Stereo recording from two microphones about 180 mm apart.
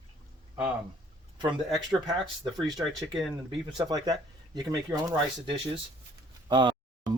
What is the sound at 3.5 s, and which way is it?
Speech, 20° right (ahead or behind).